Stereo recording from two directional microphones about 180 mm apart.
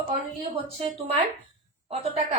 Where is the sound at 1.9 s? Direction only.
35° right (ahead or behind).